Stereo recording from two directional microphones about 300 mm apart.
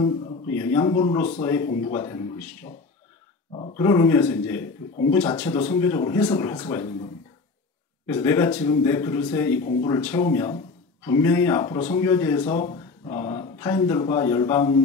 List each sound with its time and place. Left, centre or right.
0.0 s speech: centre
3.5 s speech: centre
8.1 s speech: centre